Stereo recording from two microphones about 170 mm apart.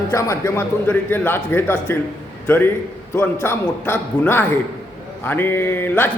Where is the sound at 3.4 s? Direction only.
15° left (ahead or behind).